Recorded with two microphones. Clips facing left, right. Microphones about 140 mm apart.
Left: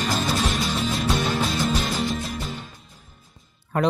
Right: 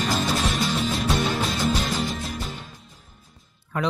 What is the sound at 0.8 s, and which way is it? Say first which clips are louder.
Music: even; centre (ahead or behind).